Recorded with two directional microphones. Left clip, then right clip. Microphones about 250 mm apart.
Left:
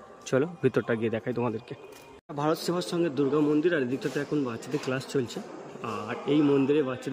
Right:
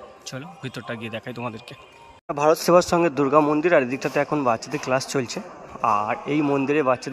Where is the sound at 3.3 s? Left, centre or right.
Centre.